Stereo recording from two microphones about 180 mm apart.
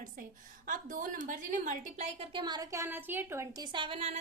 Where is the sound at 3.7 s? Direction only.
30° right (ahead or behind).